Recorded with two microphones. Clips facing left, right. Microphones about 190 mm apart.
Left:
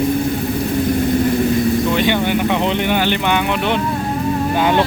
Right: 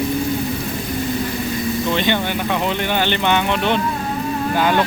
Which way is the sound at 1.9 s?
10° left (ahead or behind).